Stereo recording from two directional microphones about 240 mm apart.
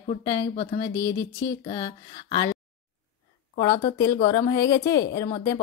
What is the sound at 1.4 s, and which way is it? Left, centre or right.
A woman's voice, centre.